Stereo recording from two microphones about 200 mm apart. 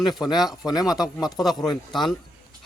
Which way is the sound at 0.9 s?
Centre (ahead or behind).